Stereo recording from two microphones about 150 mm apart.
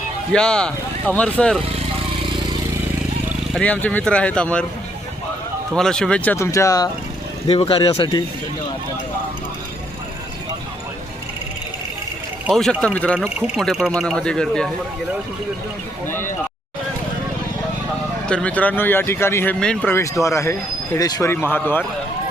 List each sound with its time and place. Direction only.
0.3 s speech: 5° left (ahead or behind)
3.5 s speech: 10° left (ahead or behind)
5.7 s speech: 5° left (ahead or behind)
6.3 s speech: 20° left (ahead or behind)
7.4 s speech: 40° left (ahead or behind)
12.5 s speech: 5° left (ahead or behind)
13.1 s speech: centre (ahead or behind)
18.3 s speech: 5° left (ahead or behind)
19.5 s speech: 5° left (ahead or behind)
19.9 s speech: 20° left (ahead or behind)